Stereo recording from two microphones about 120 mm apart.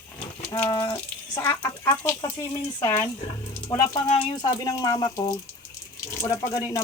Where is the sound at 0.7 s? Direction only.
25° left (ahead or behind).